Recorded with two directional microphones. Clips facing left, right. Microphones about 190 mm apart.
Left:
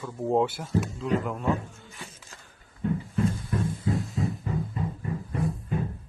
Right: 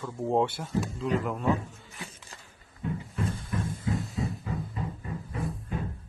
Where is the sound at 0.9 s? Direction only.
Centre (ahead or behind).